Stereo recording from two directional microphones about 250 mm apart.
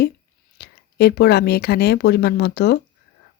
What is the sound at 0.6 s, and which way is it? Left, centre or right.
Speech, left.